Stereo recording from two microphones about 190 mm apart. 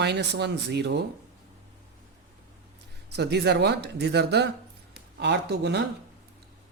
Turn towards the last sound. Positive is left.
turn(degrees=-60)  # may be behind; listen again after turning